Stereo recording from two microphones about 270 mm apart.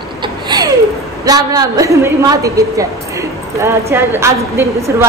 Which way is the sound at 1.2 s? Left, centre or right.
Centre.